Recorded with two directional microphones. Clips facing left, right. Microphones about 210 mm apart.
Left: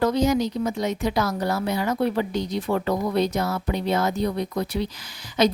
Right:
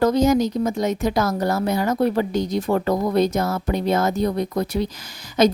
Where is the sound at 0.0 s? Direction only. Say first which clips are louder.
Right 4 dB; 45° right (ahead or behind).